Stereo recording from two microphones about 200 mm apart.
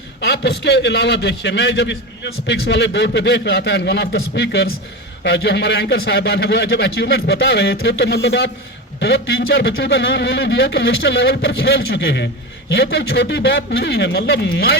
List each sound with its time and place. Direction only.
0.2 s a man's voice: 55° left (ahead or behind)